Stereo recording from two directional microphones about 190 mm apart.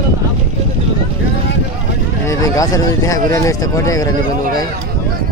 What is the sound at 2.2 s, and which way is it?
Speech, 15° left (ahead or behind).